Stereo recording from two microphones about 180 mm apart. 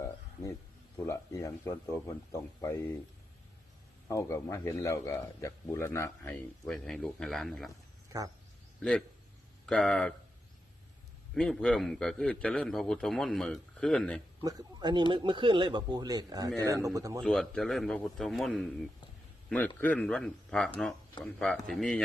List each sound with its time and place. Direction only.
0.9 s a man's voice: 15° left (ahead or behind)
4.1 s a man's voice: 15° left (ahead or behind); by 7.7 s centre (ahead or behind)
8.1 s speech: 20° right (ahead or behind)
8.8 s a man's voice: 5° left (ahead or behind)
11.3 s a man's voice: 5° left (ahead or behind)
14.4 s speech: 25° right (ahead or behind)
17.2 s a man's voice: 5° left (ahead or behind)